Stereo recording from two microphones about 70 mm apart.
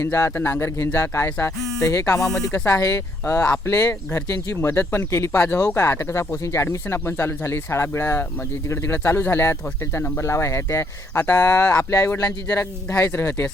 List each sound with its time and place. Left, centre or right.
0.0 s speech: left
1.8 s speech: left
2.1 s speech: centre
2.5 s speech: left
3.5 s speech: left
3.8 s speech: left
6.7 s speech: left
11.2 s speech: left
11.8 s speech: left